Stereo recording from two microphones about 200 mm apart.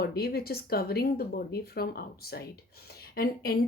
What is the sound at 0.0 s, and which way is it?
Speech, 50° left (ahead or behind).